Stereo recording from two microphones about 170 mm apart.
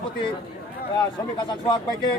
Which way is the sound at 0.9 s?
25° left (ahead or behind).